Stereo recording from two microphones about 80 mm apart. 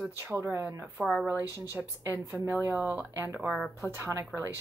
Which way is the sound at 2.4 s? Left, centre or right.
Right.